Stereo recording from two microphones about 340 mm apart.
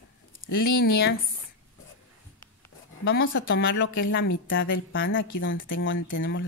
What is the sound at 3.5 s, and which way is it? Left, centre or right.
A woman's voice, left.